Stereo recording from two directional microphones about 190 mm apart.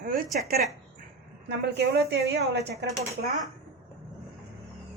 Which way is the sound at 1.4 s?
60° right (ahead or behind).